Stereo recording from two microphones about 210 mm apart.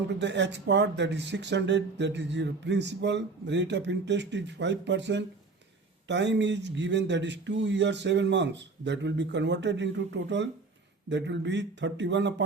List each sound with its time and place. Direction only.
0.2 s speech: 55° right (ahead or behind)